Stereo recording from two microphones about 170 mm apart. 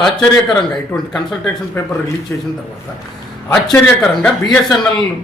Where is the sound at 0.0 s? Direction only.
Centre (ahead or behind).